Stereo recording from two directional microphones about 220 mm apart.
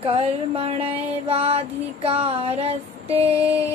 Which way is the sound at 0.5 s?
25° right (ahead or behind).